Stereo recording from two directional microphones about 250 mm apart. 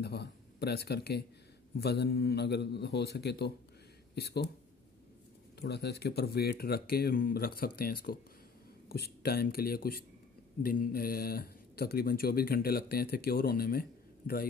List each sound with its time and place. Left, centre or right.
0.0 s a man's voice: left
5.6 s speech: left